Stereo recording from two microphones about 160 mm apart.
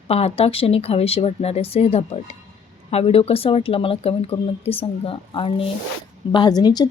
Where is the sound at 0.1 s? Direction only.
40° left (ahead or behind).